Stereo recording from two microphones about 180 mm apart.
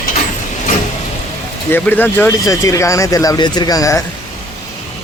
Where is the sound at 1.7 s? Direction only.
10° left (ahead or behind).